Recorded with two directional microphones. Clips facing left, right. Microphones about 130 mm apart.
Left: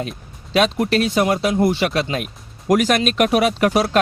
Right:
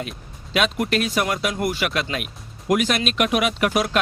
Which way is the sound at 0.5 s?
35° left (ahead or behind).